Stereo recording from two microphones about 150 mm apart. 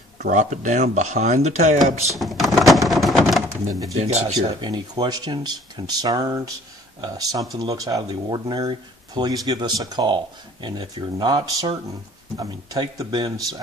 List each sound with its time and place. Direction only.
0.3 s speech: 55° right (ahead or behind)
2.1 s speech: centre (ahead or behind)
4.0 s speech: 45° right (ahead or behind)
4.5 s speech: 30° right (ahead or behind)